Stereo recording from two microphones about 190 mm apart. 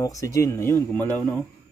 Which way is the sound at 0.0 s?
15° left (ahead or behind).